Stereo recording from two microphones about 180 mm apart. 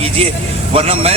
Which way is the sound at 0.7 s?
35° right (ahead or behind).